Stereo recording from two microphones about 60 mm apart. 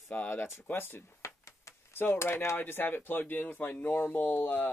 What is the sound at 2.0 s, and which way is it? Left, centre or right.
Speech, left.